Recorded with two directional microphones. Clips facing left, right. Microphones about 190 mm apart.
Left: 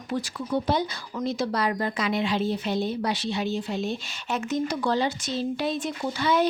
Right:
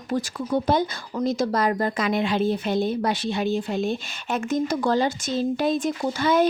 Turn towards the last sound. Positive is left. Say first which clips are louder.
# right 3 dB
turn(degrees=-45)  # may be behind; listen again after turning